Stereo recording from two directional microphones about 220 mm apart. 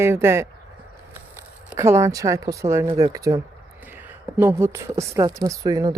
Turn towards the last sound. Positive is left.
turn(degrees=-15)  # may be behind; listen again after turning